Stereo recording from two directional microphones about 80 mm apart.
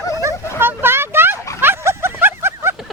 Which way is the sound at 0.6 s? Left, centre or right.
Right.